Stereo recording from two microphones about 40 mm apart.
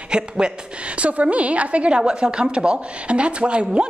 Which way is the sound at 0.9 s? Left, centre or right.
Right.